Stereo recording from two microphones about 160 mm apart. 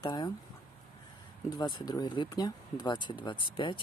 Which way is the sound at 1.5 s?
25° left (ahead or behind).